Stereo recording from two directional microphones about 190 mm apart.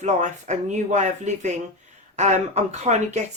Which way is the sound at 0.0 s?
40° right (ahead or behind).